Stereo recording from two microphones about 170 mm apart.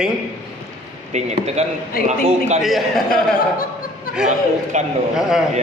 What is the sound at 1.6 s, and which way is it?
A man's voice, 40° right (ahead or behind).